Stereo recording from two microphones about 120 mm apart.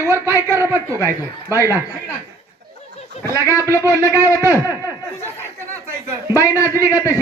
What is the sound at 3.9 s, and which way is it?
Speech, 20° right (ahead or behind).